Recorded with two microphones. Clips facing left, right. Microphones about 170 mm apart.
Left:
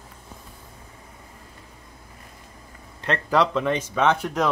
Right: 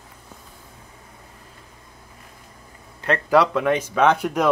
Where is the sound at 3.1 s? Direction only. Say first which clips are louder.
Right 3 dB; 5° right (ahead or behind).